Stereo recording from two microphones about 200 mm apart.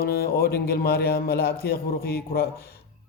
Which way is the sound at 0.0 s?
50° left (ahead or behind).